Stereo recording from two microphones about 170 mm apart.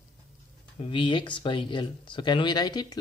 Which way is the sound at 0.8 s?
30° left (ahead or behind).